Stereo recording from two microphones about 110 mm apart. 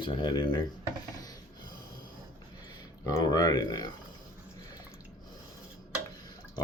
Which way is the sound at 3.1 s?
35° left (ahead or behind).